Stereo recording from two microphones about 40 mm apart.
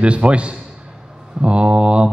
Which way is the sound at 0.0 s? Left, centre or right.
Right.